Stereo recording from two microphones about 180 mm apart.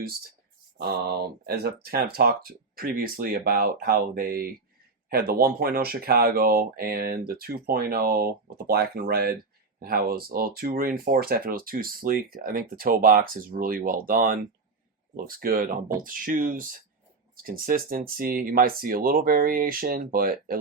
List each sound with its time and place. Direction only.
0.8 s speech: 60° right (ahead or behind)